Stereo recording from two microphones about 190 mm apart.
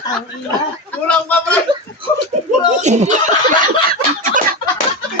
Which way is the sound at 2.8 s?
40° right (ahead or behind).